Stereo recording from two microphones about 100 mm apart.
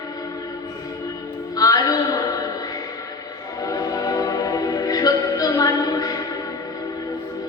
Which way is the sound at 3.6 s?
35° left (ahead or behind).